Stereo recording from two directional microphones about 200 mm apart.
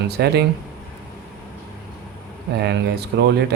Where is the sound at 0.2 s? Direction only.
55° right (ahead or behind).